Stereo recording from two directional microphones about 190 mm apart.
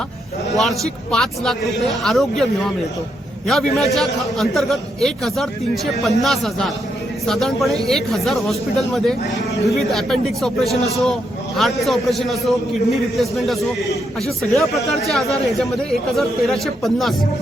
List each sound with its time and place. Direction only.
0.5 s a man's voice: centre (ahead or behind)
3.4 s a man's voice: centre (ahead or behind)